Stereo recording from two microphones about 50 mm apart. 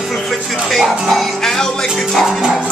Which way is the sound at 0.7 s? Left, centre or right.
Centre.